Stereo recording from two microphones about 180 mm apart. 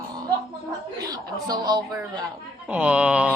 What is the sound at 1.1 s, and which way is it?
Speech, 20° right (ahead or behind).